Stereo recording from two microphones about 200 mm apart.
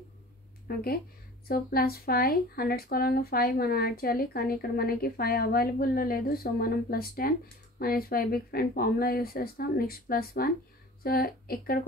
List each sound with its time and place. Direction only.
0.7 s speech: 50° left (ahead or behind)